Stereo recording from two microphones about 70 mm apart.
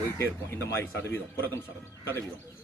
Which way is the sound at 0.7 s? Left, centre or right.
Left.